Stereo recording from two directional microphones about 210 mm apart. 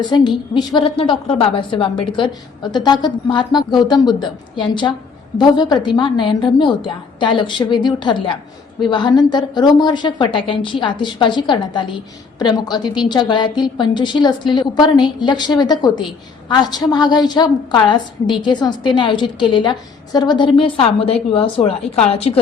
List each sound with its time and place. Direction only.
0.1 s a woman's voice: 20° left (ahead or behind)